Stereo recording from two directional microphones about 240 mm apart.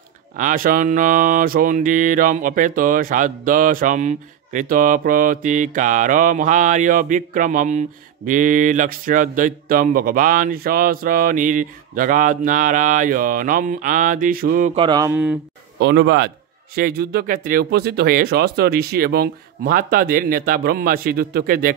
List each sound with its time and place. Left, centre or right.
0.4 s speech: right
14.8 s speech: centre
15.8 s a man's voice: right